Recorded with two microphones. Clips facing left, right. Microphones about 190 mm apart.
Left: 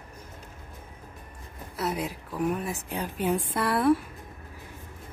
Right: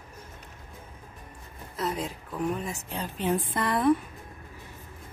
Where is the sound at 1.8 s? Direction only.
10° left (ahead or behind).